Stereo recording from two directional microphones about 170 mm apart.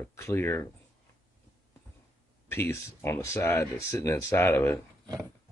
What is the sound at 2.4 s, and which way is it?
Speech, 15° left (ahead or behind).